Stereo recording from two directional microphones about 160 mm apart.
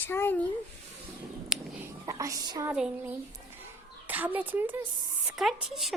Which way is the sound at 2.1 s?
20° right (ahead or behind).